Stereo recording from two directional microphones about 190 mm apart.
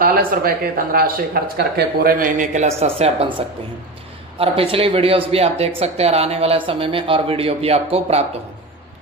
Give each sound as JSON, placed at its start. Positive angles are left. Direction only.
{"t": 0.0, "sound": "speech", "side_deg": -50}
{"t": 4.4, "sound": "speech", "side_deg": -30}